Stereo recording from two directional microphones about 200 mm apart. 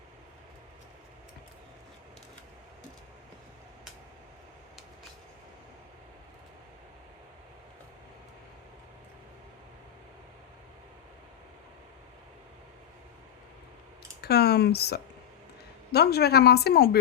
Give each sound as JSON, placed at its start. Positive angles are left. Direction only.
{"t": 14.2, "sound": "speech", "side_deg": 55}